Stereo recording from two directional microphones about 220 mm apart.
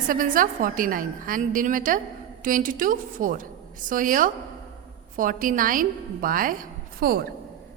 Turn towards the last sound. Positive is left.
turn(degrees=-45)  # may be behind; listen again after turning